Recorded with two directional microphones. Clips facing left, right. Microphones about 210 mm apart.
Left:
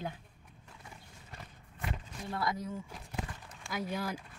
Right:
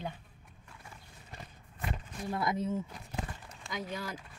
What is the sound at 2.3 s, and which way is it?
Speech, 20° right (ahead or behind).